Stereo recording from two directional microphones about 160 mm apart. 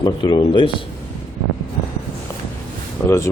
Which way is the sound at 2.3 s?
15° left (ahead or behind).